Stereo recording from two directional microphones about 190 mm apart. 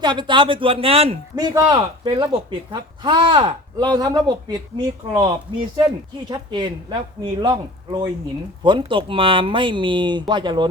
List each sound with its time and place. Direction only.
0.0 s speech: 25° right (ahead or behind)